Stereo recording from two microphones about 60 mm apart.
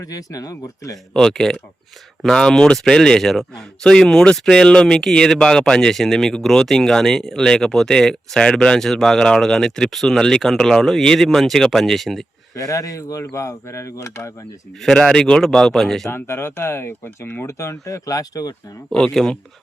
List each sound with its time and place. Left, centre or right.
0.0 s speech: left
1.1 s speech: centre
12.5 s speech: left
14.8 s speech: centre
16.0 s speech: left
18.9 s speech: centre